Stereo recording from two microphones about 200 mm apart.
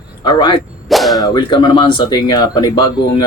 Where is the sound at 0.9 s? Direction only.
Centre (ahead or behind).